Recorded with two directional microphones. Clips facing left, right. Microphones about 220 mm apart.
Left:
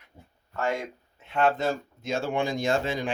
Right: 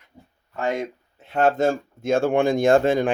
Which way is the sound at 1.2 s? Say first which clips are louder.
Right 5 dB; 40° right (ahead or behind).